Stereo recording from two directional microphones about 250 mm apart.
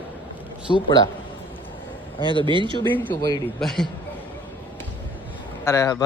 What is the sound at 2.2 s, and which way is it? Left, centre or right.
Speech, centre.